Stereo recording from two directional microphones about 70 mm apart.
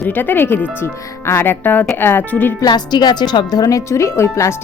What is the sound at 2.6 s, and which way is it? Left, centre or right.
Speech, left.